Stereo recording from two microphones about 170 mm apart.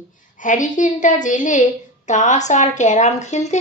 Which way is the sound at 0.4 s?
50° left (ahead or behind).